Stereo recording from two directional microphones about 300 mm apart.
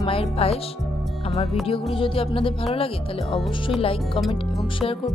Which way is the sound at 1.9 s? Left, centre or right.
Centre.